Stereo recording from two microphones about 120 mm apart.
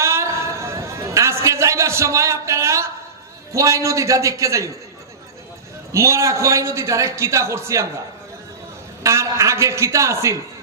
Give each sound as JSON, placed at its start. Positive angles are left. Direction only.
{"t": 0.0, "sound": "a sound", "side_deg": -25}
{"t": 3.5, "sound": "a man's voice", "side_deg": -25}
{"t": 5.9, "sound": "a man's voice", "side_deg": -25}
{"t": 9.0, "sound": "a man's voice", "side_deg": -25}